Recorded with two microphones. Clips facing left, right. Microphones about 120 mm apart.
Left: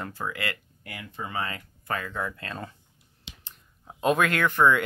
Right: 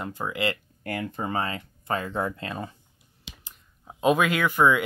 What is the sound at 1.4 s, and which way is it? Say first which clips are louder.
Speech: right 3 dB; 25° right (ahead or behind).